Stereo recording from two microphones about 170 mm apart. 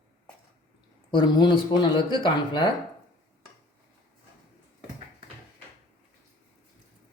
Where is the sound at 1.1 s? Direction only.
25° left (ahead or behind).